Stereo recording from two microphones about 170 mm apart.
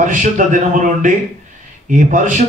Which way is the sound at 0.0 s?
50° right (ahead or behind).